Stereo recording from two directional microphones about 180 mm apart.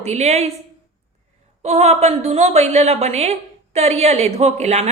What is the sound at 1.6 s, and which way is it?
A woman's voice, 35° right (ahead or behind).